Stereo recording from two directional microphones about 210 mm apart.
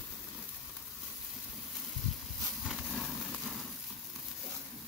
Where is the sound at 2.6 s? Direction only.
Centre (ahead or behind).